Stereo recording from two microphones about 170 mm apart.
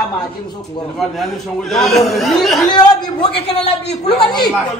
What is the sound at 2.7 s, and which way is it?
Speech, 25° left (ahead or behind).